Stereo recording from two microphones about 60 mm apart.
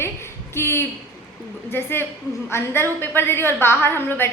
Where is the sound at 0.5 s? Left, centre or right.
Left.